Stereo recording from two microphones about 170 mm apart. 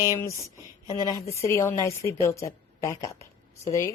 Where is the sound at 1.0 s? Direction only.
20° left (ahead or behind).